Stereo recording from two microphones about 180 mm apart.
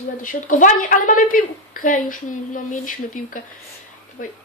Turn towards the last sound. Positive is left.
turn(degrees=50)  # may be behind; listen again after turning